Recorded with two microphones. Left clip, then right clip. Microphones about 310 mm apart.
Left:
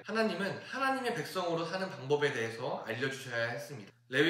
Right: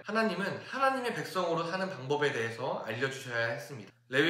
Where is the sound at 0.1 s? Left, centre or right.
Centre.